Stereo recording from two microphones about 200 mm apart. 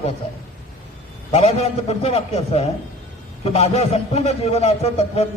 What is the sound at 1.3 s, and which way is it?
A man's voice, 30° left (ahead or behind).